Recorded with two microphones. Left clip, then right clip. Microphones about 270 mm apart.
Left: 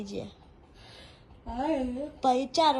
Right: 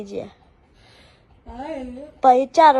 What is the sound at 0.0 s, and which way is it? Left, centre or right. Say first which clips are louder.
Speech: right 8 dB; centre.